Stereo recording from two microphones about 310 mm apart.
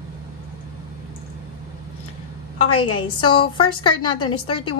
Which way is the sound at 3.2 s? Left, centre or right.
Centre.